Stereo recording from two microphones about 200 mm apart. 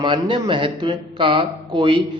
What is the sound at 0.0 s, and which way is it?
Speech, 20° right (ahead or behind).